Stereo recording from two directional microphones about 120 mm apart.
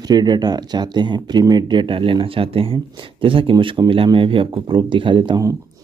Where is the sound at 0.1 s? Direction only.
35° right (ahead or behind).